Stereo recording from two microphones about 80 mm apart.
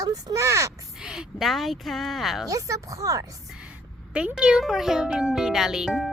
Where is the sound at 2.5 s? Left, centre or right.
Right.